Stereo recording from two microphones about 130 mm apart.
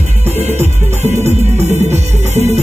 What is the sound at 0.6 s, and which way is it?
Music, 60° right (ahead or behind).